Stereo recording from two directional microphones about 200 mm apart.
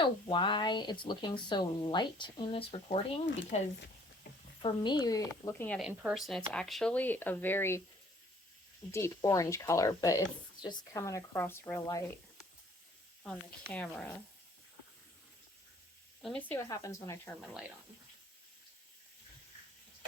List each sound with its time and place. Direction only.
0.0 s speech: 25° left (ahead or behind); by 5.9 s 5° left (ahead or behind)
5.9 s speech: 5° right (ahead or behind); by 7.8 s 10° left (ahead or behind)
8.9 s speech: 15° left (ahead or behind)
13.2 s speech: 5° left (ahead or behind)
16.2 s speech: 5° left (ahead or behind)
17.4 s speech: 5° right (ahead or behind)